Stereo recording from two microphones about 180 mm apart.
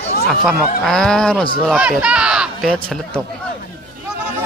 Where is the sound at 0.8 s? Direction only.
5° left (ahead or behind).